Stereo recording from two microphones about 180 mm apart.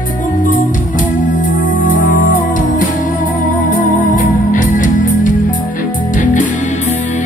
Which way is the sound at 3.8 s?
45° left (ahead or behind).